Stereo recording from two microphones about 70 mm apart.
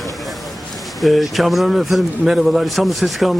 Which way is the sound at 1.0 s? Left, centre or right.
Centre.